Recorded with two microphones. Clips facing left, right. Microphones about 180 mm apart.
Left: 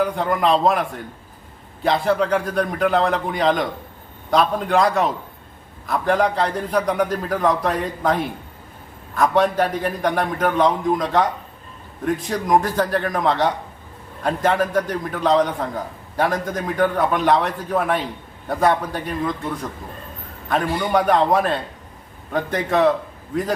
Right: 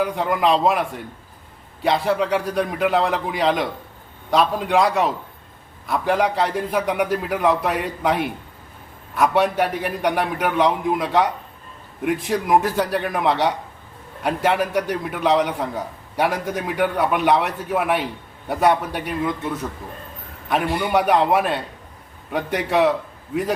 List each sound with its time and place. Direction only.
0.0 s a man's voice: centre (ahead or behind)
20.5 s a man's voice: 10° right (ahead or behind)